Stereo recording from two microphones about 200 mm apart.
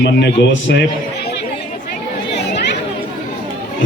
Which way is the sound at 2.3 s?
60° left (ahead or behind).